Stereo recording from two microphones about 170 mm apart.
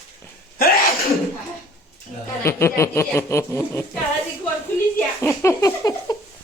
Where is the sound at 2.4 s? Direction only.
15° left (ahead or behind).